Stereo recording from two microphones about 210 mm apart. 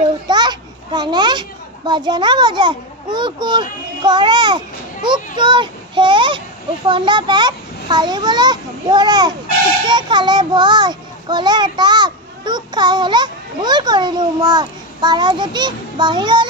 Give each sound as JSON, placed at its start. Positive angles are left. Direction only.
{"t": 0.0, "sound": "children playing", "side_deg": -20}
{"t": 1.9, "sound": "a child's voice", "side_deg": -20}